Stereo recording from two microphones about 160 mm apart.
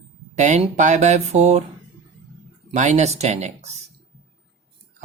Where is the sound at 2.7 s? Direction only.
45° right (ahead or behind).